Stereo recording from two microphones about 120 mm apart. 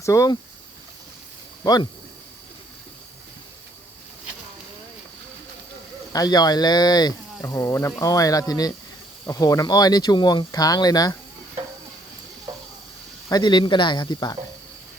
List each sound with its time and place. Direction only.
0.0 s speech: 25° left (ahead or behind)
1.6 s speech: 35° left (ahead or behind)
6.1 s speech: 35° left (ahead or behind)
13.2 s speech: 35° left (ahead or behind)